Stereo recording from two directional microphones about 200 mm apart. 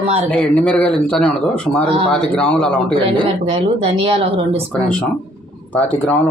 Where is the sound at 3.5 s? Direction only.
30° right (ahead or behind).